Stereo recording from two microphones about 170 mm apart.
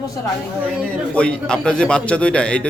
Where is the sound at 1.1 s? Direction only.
5° left (ahead or behind).